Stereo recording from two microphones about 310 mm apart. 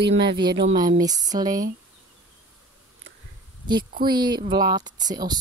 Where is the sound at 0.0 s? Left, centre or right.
Right.